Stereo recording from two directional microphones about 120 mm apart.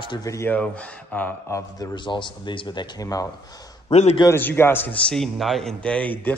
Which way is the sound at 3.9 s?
65° left (ahead or behind).